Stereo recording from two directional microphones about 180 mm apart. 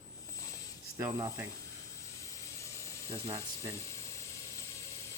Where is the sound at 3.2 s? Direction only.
15° right (ahead or behind).